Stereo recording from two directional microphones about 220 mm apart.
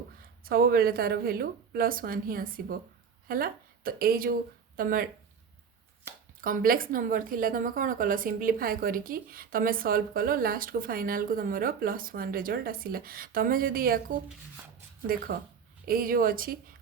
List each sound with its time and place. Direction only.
0.4 s a woman's voice: 40° right (ahead or behind)
6.4 s a woman's voice: 40° right (ahead or behind)